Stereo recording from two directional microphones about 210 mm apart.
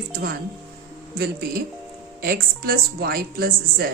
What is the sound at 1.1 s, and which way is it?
A woman's voice, 50° right (ahead or behind).